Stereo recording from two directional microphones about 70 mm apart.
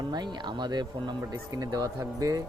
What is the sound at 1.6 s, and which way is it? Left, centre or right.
Speech, right.